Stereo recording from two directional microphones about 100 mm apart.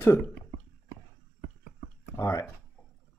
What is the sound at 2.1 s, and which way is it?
Speech, 30° left (ahead or behind).